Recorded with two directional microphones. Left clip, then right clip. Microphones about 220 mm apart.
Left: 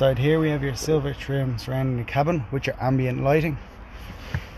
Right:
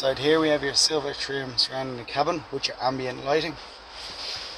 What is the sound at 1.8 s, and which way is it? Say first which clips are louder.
Speech: left 2 dB; 10° left (ahead or behind).